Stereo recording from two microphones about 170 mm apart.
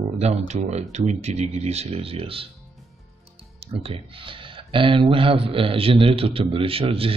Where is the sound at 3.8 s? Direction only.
30° right (ahead or behind).